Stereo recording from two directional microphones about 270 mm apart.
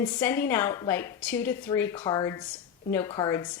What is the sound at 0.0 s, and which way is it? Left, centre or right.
A woman's voice, centre.